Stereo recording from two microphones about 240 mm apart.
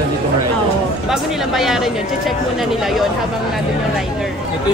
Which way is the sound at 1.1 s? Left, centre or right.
Centre.